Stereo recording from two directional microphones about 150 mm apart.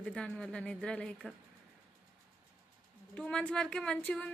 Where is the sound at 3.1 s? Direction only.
5° left (ahead or behind).